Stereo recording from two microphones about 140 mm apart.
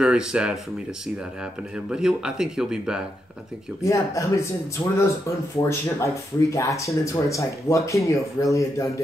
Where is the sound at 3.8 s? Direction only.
20° left (ahead or behind).